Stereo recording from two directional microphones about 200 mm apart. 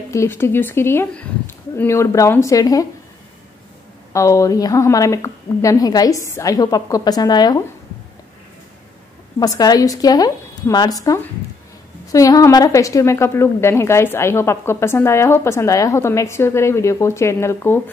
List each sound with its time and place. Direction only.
0.1 s a woman's voice: 15° left (ahead or behind)
4.1 s a woman's voice: 15° left (ahead or behind)
9.4 s a woman's voice: 20° left (ahead or behind)